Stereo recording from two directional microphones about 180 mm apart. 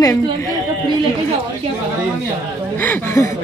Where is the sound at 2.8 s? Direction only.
10° left (ahead or behind).